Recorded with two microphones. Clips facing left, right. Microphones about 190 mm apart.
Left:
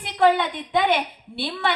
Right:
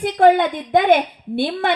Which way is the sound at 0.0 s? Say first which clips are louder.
Right 6 dB; 45° right (ahead or behind).